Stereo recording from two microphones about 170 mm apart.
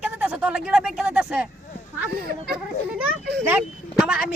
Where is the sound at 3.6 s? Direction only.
5° right (ahead or behind).